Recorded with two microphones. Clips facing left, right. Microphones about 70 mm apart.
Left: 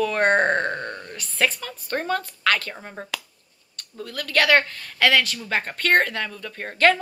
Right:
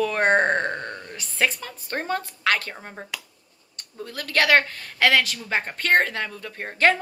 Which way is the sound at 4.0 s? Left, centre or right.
Right.